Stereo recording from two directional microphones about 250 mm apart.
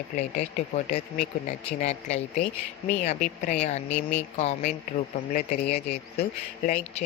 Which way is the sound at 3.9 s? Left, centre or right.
Centre.